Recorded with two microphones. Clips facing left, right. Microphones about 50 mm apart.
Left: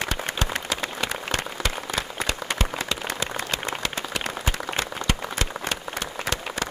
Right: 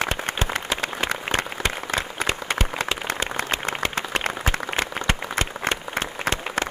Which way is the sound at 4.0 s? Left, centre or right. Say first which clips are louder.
Right 4 dB; right.